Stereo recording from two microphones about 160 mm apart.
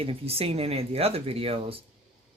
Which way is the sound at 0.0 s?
35° right (ahead or behind).